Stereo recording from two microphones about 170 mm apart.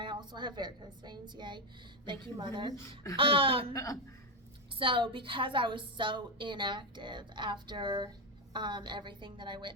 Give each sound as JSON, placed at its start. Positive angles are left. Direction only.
{"t": 0.0, "sound": "a woman's voice", "side_deg": -25}
{"t": 3.7, "sound": "speech", "side_deg": 20}
{"t": 4.7, "sound": "a woman's voice", "side_deg": -30}